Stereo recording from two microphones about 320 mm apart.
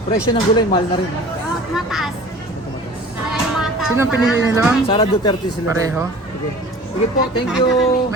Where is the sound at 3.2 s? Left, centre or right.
Centre.